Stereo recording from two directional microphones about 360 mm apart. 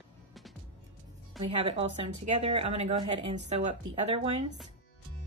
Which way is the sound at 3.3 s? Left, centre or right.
Right.